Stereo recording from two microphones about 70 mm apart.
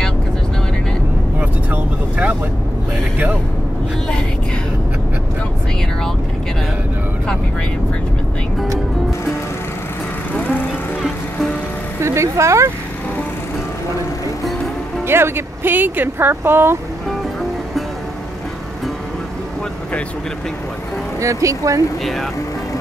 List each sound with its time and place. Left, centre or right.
1.4 s vehicle: right
10.3 s vehicle: left
10.7 s music: centre
12.0 s vehicle: right
15.0 s speech: right
21.2 s speech: right
22.0 s speech: centre